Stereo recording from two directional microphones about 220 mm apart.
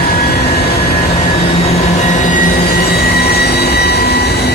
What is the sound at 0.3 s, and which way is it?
Vehicle, 45° left (ahead or behind).